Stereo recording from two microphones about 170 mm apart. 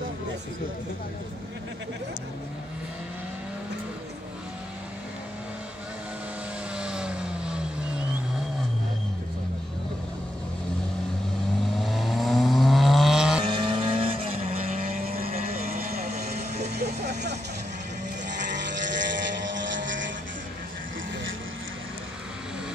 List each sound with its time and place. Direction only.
6.8 s vehicle: 5° right (ahead or behind)
11.8 s vehicle: centre (ahead or behind)
13.4 s vehicle: 30° right (ahead or behind)
14.9 s vehicle: 60° right (ahead or behind)
15.3 s vehicle: 40° right (ahead or behind)
15.6 s vehicle: 55° right (ahead or behind)
16.2 s vehicle: 65° right (ahead or behind)
18.3 s vehicle: 90° right